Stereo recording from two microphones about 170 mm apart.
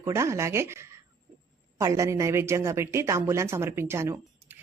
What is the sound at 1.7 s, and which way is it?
A man's voice, 20° right (ahead or behind).